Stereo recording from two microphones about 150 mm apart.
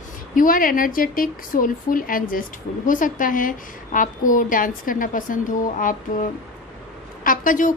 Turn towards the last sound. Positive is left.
turn(degrees=60)  # may be behind; listen again after turning